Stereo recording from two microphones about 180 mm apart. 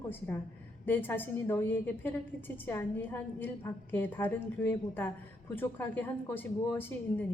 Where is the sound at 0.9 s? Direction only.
10° left (ahead or behind).